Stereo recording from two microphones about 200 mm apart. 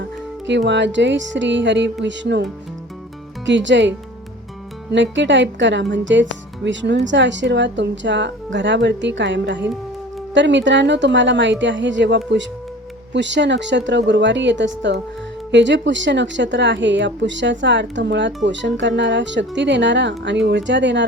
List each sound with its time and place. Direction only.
0.4 s speech: 65° right (ahead or behind)